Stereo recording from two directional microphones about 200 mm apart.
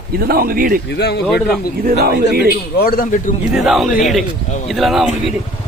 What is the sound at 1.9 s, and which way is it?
Speech, 50° right (ahead or behind).